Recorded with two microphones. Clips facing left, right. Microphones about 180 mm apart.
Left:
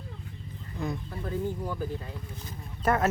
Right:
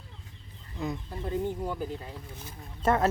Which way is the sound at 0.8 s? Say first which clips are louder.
Even; 20° right (ahead or behind).